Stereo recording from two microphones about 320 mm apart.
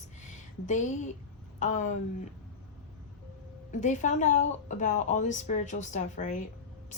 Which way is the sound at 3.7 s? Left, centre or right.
Left.